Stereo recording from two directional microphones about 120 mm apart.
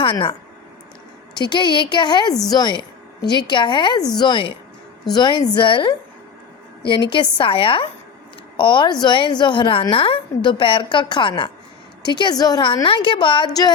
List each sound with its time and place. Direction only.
0.0 s a woman's voice: 45° left (ahead or behind)